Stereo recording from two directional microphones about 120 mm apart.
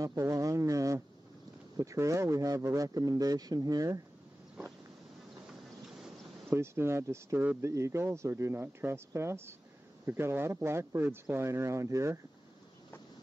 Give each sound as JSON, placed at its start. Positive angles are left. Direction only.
{"t": 0.0, "sound": "speech", "side_deg": -25}
{"t": 5.5, "sound": "boat", "side_deg": -5}
{"t": 6.5, "sound": "speech", "side_deg": -20}